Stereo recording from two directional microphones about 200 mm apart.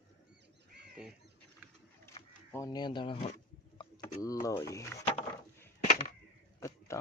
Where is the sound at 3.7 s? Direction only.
15° left (ahead or behind).